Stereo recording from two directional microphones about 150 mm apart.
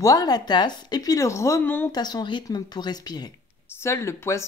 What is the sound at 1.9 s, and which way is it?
Speech, 25° left (ahead or behind).